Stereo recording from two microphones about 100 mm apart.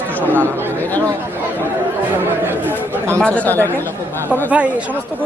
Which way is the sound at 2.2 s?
20° right (ahead or behind).